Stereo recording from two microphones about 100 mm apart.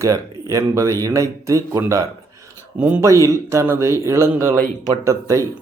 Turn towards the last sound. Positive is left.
turn(degrees=-30)  # may be behind; listen again after turning